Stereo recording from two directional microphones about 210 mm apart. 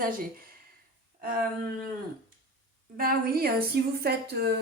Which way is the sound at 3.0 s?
45° right (ahead or behind).